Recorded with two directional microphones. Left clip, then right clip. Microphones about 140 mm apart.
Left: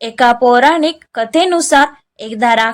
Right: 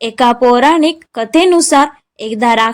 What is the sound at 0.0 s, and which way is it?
Speech, 20° right (ahead or behind).